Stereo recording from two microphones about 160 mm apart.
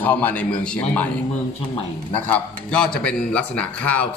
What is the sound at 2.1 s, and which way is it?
A man's voice, 10° left (ahead or behind).